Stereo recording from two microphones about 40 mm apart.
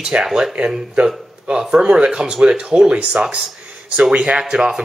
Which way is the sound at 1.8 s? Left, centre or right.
Right.